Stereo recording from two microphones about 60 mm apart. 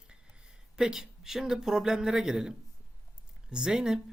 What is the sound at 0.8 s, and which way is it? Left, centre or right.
Speech, centre.